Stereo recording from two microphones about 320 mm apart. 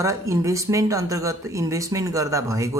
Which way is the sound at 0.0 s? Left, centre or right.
Centre.